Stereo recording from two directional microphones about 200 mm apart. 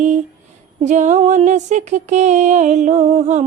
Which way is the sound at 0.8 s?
35° right (ahead or behind).